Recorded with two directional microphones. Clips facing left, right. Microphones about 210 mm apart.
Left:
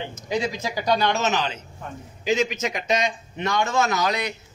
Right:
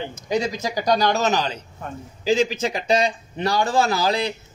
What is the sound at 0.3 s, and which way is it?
A man's voice, 45° right (ahead or behind).